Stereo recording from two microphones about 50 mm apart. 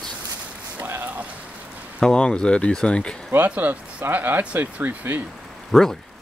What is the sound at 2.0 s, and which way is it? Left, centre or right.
Speech, centre.